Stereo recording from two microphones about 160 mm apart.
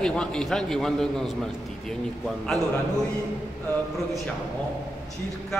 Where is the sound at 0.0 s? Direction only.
5° left (ahead or behind).